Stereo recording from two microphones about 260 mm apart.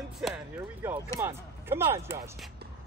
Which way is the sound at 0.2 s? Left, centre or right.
Centre.